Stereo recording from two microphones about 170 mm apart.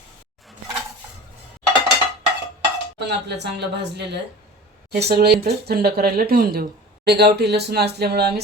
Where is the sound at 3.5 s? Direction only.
85° right.